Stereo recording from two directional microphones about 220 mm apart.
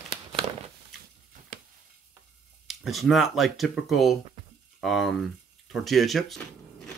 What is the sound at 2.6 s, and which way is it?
Speech, centre (ahead or behind).